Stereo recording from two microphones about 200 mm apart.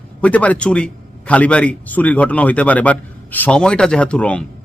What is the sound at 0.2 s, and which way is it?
A man's voice, 5° left (ahead or behind).